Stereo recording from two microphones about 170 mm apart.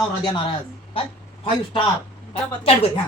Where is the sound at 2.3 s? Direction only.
30° left (ahead or behind).